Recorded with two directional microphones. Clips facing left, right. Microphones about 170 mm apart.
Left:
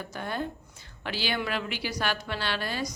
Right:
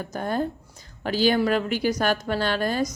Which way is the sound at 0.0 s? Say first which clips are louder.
Right 7 dB; 40° right (ahead or behind).